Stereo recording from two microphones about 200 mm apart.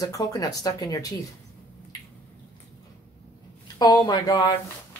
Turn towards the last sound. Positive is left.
turn(degrees=20)  # may be behind; listen again after turning